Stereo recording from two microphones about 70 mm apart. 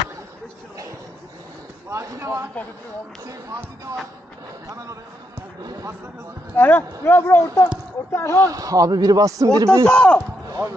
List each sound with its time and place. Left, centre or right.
1.9 s speech: right
5.6 s a man's voice: right
6.5 s speech: left
8.5 s a man's voice: right
8.9 s a man's voice: right
9.8 s speech: centre